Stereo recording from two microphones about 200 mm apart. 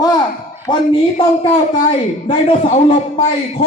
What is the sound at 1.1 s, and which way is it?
A man's voice, 25° left (ahead or behind).